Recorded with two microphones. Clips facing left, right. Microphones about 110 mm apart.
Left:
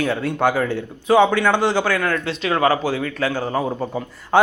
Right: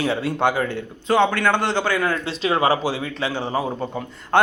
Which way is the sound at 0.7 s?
10° left (ahead or behind).